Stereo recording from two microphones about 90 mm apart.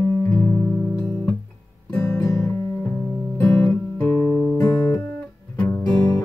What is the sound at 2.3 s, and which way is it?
Music, 30° left (ahead or behind).